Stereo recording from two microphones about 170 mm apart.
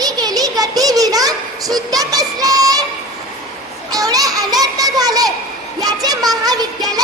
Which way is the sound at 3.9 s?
20° right (ahead or behind).